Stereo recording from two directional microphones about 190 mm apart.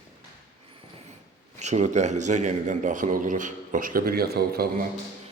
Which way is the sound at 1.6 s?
35° right (ahead or behind).